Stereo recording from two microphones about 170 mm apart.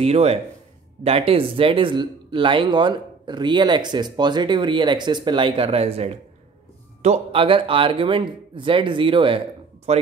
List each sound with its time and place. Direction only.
0.0 s speech: 35° right (ahead or behind)